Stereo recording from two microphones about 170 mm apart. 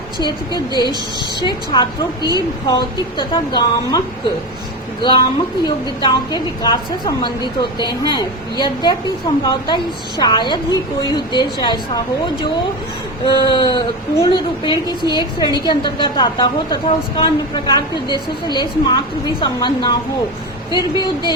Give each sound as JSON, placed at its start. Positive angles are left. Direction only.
{"t": 0.2, "sound": "a woman's voice", "side_deg": 25}
{"t": 5.6, "sound": "a woman's voice", "side_deg": 25}
{"t": 13.2, "sound": "a woman's voice", "side_deg": 30}